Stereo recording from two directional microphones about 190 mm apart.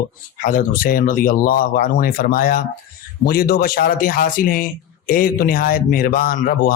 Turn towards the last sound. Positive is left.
turn(degrees=45)  # may be behind; listen again after turning